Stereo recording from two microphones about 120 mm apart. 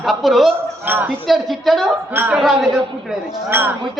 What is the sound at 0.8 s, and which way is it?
Speech, 15° right (ahead or behind).